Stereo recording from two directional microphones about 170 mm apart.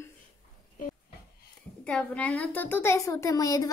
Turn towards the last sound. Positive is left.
turn(degrees=20)  # may be behind; listen again after turning